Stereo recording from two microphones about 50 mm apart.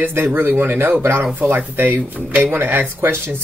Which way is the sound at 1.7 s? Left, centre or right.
Right.